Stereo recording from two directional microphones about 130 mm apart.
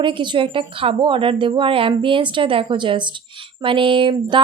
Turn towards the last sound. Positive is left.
turn(degrees=-40)  # may be behind; listen again after turning